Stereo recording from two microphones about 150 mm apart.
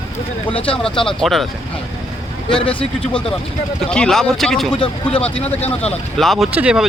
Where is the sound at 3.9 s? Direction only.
5° left (ahead or behind).